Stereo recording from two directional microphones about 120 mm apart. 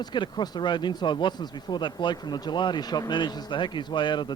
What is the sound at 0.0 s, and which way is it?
Speech, 40° left (ahead or behind).